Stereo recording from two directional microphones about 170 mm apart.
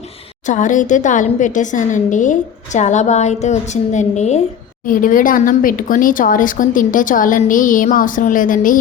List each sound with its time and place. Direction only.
0.4 s a woman's voice: 50° left (ahead or behind)
4.9 s a woman's voice: 50° left (ahead or behind)